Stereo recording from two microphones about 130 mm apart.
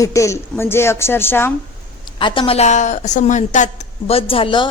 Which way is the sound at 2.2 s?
40° left (ahead or behind).